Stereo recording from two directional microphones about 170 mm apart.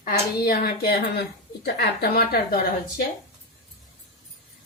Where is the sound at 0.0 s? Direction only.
60° left (ahead or behind).